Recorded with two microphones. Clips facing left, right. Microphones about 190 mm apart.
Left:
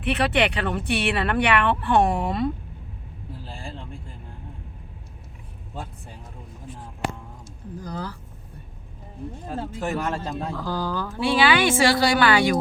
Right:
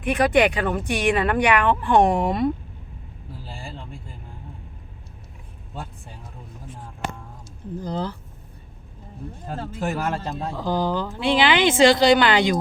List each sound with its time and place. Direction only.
0.0 s speech: 15° right (ahead or behind)
7.8 s speech: 25° right (ahead or behind)
9.8 s speech: 5° right (ahead or behind)
10.6 s speech: 20° right (ahead or behind)